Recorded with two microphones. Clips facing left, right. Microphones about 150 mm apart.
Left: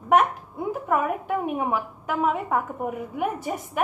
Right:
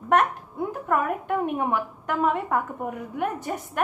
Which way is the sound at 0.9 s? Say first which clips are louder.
Even; 5° left (ahead or behind).